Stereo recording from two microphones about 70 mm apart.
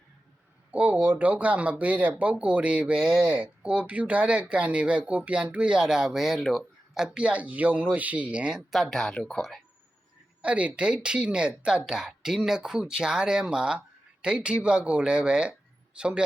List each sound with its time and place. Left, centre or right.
0.7 s speech: right
8.8 s speech: centre
10.4 s speech: centre